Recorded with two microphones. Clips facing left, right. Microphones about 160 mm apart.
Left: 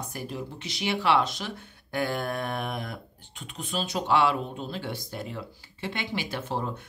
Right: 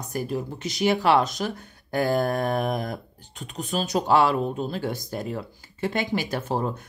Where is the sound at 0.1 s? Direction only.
45° right (ahead or behind).